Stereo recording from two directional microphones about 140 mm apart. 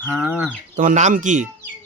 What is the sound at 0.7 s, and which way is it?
Speech, 60° right (ahead or behind).